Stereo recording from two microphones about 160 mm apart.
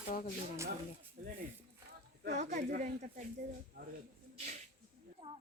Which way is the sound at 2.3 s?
50° right (ahead or behind).